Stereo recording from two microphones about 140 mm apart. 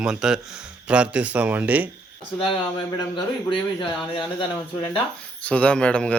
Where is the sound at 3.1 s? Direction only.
35° left (ahead or behind).